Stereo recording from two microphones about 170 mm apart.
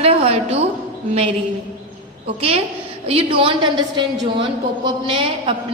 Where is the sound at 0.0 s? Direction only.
35° right (ahead or behind).